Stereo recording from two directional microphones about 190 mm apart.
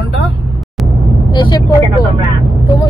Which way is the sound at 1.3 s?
25° left (ahead or behind).